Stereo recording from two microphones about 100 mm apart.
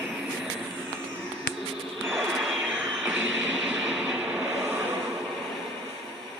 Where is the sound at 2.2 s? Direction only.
Centre (ahead or behind).